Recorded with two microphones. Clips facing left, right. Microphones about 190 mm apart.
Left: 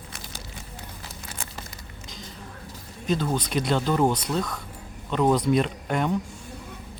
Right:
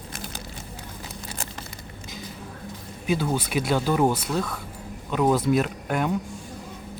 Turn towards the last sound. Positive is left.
turn(degrees=-5)  # may be behind; listen again after turning